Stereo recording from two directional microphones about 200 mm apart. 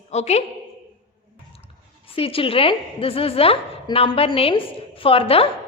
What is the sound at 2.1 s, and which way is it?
A woman's voice, 30° left (ahead or behind).